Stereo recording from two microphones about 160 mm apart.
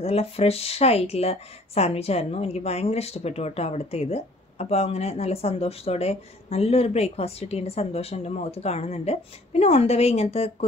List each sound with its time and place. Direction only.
0.0 s speech: 40° left (ahead or behind)